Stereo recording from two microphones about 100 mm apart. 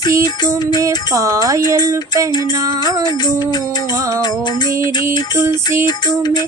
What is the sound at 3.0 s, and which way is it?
Music, 45° left (ahead or behind).